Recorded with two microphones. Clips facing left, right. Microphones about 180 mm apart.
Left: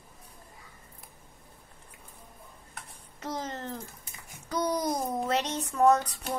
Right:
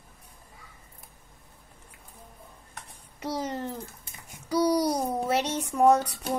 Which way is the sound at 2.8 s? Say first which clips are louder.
Right 3 dB; 10° right (ahead or behind).